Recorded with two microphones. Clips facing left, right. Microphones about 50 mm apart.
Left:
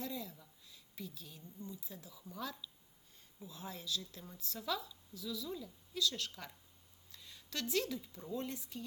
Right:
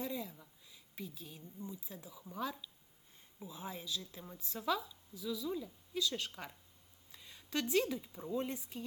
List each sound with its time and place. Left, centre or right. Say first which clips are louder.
0.0 s a woman's voice: right 2 dB; centre